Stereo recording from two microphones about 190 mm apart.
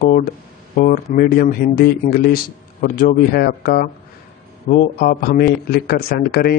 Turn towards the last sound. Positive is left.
turn(degrees=55)  # may be behind; listen again after turning